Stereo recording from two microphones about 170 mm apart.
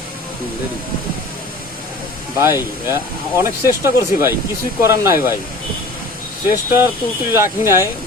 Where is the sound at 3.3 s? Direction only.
15° right (ahead or behind).